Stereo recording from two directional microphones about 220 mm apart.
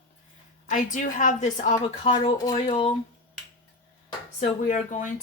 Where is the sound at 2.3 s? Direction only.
20° left (ahead or behind).